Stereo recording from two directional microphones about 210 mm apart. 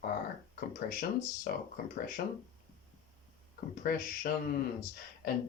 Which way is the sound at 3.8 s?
45° left (ahead or behind).